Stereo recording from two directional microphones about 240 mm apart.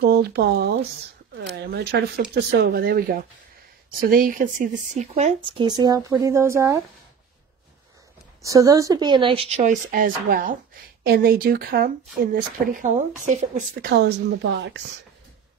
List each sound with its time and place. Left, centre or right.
0.0 s speech: right; by 6.8 s centre
8.4 s speech: centre; by 14.8 s right